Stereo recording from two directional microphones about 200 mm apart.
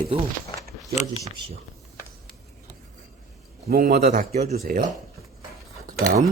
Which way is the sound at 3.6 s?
50° right (ahead or behind).